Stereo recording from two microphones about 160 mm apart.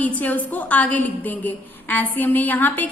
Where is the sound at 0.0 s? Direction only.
10° left (ahead or behind).